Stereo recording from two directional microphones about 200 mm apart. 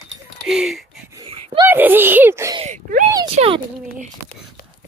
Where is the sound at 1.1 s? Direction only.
25° right (ahead or behind).